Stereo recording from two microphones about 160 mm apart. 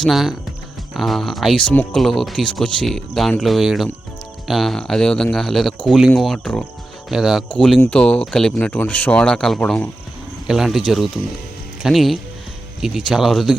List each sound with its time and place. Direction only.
0.0 s speech: centre (ahead or behind)